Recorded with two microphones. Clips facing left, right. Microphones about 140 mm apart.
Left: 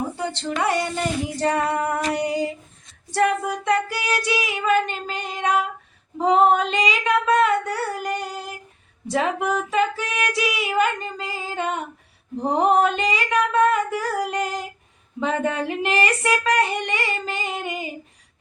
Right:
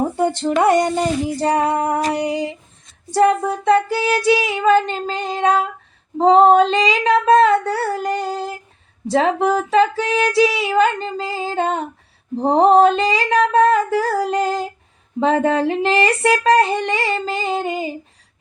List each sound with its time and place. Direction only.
0.2 s female singing: 50° right (ahead or behind); by 17.9 s 30° right (ahead or behind)